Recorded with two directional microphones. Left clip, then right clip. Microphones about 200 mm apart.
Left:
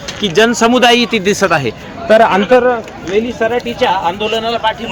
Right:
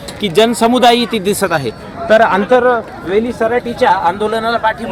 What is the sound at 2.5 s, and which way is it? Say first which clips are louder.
Speech: left 1 dB; 25° left (ahead or behind).